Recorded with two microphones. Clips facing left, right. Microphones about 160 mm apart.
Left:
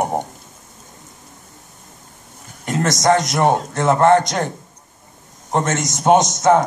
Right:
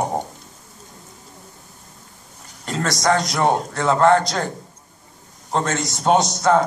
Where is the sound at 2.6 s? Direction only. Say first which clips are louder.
Left 4 dB; 20° left (ahead or behind).